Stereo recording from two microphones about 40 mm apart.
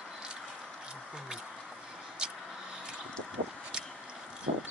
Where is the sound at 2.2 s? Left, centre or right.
Right.